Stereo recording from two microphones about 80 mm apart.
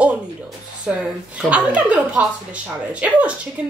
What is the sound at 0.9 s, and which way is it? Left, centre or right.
A woman's voice, centre.